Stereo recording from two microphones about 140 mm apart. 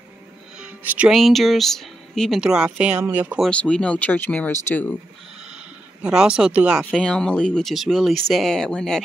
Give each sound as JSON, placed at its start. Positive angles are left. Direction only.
{"t": 0.6, "sound": "speech", "side_deg": -10}
{"t": 3.4, "sound": "speech", "side_deg": 5}
{"t": 6.0, "sound": "speech", "side_deg": -5}
{"t": 6.9, "sound": "speech", "side_deg": 5}